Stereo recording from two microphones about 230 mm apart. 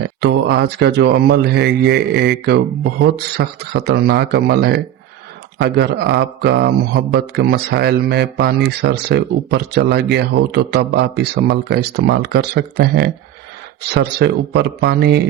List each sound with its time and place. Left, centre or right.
0.2 s speech: right